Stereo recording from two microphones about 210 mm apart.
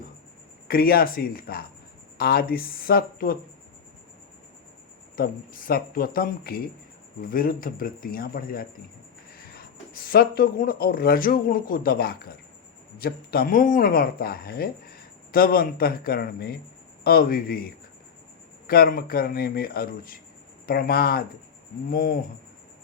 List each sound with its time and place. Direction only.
0.7 s speech: 45° left (ahead or behind)
5.1 s speech: 45° left (ahead or behind)
18.7 s speech: 45° left (ahead or behind)